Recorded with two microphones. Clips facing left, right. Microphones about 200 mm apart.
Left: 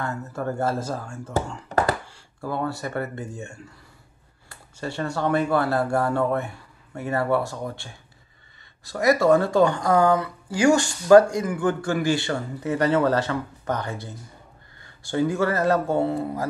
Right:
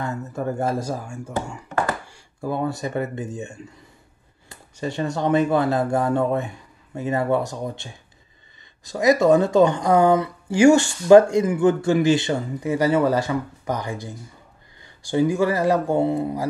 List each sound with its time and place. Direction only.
0.0 s speech: 15° right (ahead or behind)